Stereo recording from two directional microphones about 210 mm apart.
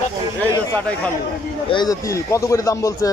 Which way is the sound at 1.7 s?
15° left (ahead or behind).